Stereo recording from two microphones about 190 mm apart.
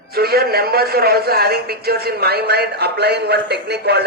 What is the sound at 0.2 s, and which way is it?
A man's voice, 55° right (ahead or behind).